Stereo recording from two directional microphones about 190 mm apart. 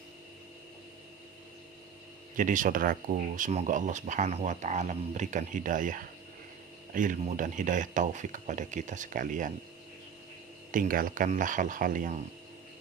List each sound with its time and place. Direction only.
2.3 s speech: 45° right (ahead or behind)
10.7 s speech: 45° right (ahead or behind)